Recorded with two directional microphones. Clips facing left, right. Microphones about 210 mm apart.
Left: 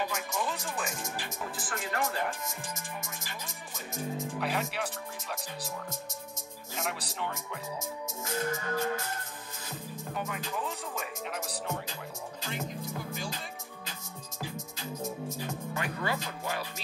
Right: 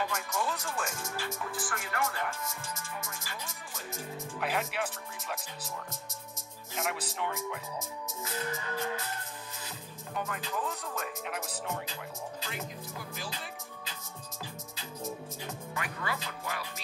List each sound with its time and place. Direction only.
0.4 s speech: 15° left (ahead or behind)
2.2 s music: 20° left (ahead or behind)
4.4 s speech: centre (ahead or behind)
6.8 s speech: 5° right (ahead or behind)
8.2 s music: 45° left (ahead or behind)
10.1 s speech: 5° left (ahead or behind)
15.7 s speech: 30° left (ahead or behind)